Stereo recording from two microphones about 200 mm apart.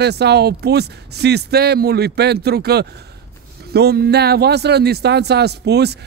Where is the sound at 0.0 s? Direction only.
55° right (ahead or behind).